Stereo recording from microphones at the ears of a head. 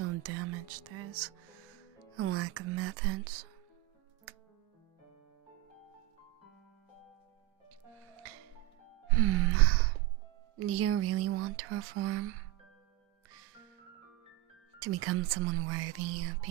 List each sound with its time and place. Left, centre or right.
0.0 s whispering: right
2.1 s speech: right
8.1 s music: right
10.6 s speech: right
14.8 s speech: right